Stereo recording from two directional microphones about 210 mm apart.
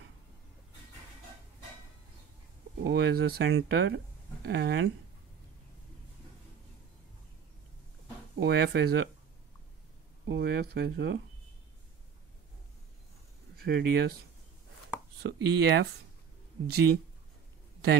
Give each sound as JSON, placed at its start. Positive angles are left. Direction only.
{"t": 2.8, "sound": "speech", "side_deg": -50}
{"t": 8.4, "sound": "speech", "side_deg": -50}
{"t": 10.2, "sound": "speech", "side_deg": -50}
{"t": 13.7, "sound": "speech", "side_deg": -50}
{"t": 15.2, "sound": "speech", "side_deg": -55}